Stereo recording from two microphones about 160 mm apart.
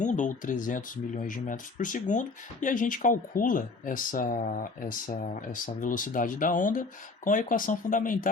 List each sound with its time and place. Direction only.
0.0 s speech: 50° left (ahead or behind)